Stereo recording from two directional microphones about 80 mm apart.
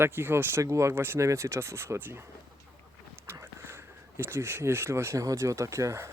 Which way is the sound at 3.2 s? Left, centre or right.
Right.